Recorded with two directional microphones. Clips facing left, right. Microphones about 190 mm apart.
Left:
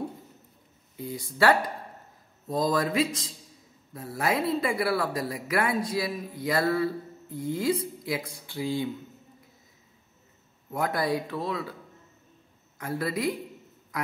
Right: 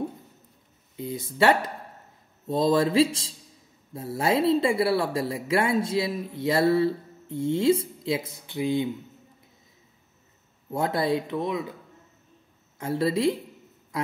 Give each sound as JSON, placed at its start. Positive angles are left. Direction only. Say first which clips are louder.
{"t": 0.9, "sound": "speech", "louder": "right 3 dB", "side_deg": -25}
{"t": 10.7, "sound": "speech", "louder": "right 3 dB", "side_deg": -25}
{"t": 12.7, "sound": "a man's voice", "louder": "right 5 dB", "side_deg": -25}